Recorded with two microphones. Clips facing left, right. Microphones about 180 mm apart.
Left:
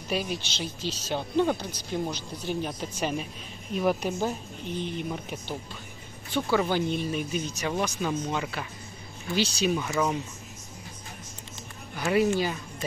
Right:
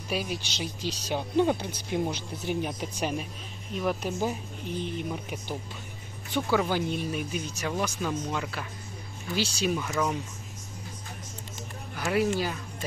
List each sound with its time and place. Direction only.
0.1 s speech: 5° right (ahead or behind)
0.7 s speech: 15° right (ahead or behind)
3.0 s speech: centre (ahead or behind)
6.6 s speech: 5° right (ahead or behind)
11.9 s speech: centre (ahead or behind)